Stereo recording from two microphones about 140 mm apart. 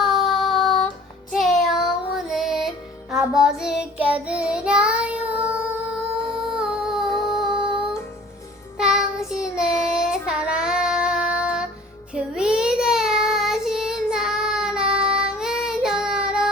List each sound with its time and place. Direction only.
0.0 s child singing: centre (ahead or behind)
1.3 s music: centre (ahead or behind)
8.8 s child singing: 5° right (ahead or behind)